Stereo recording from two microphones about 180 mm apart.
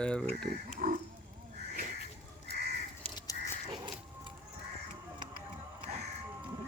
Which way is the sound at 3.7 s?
25° right (ahead or behind).